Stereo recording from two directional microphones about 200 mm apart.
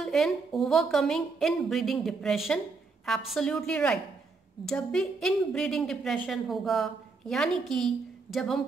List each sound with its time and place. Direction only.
0.0 s a woman's voice: centre (ahead or behind)